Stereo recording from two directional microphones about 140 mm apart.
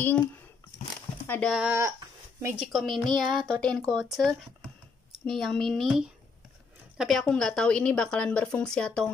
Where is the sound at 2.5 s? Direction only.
Centre (ahead or behind).